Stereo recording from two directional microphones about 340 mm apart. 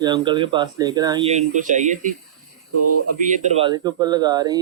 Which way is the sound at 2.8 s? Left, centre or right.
Right.